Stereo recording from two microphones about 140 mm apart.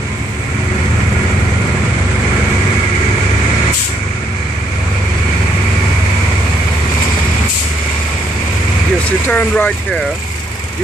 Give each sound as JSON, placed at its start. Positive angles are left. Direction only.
{"t": 9.3, "sound": "speech", "side_deg": 15}